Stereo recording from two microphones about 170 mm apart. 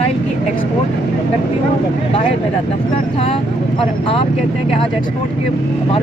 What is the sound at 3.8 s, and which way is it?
Speech, 35° left (ahead or behind).